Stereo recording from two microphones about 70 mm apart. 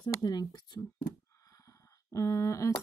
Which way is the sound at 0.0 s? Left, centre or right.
Left.